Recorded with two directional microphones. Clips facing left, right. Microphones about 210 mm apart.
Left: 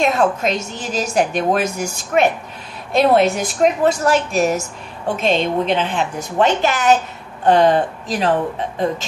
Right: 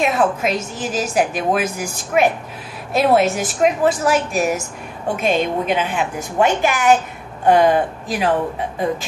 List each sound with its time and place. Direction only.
0.0 s a woman's voice: 5° right (ahead or behind)